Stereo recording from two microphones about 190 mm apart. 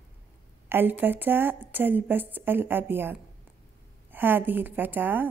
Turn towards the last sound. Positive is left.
turn(degrees=-10)  # may be behind; listen again after turning